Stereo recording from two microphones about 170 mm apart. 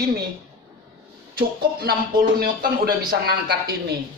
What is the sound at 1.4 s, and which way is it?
Speech, 60° right (ahead or behind).